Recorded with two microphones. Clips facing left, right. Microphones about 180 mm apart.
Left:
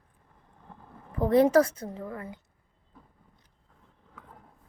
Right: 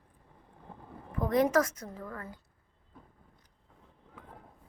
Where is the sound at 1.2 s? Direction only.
30° left (ahead or behind).